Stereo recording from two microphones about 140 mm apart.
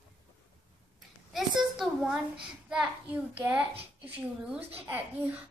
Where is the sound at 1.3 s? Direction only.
Centre (ahead or behind).